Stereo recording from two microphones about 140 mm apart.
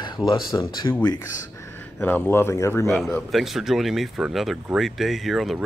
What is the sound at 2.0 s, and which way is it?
Speech, 15° left (ahead or behind).